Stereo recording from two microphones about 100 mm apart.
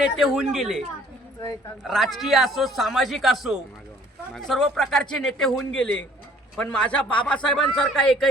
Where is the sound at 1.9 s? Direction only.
Centre (ahead or behind).